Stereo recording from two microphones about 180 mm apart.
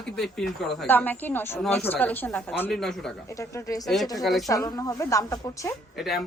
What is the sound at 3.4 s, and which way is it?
Speech, 20° left (ahead or behind).